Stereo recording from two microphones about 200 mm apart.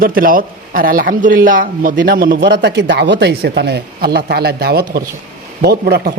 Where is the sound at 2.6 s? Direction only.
60° right (ahead or behind).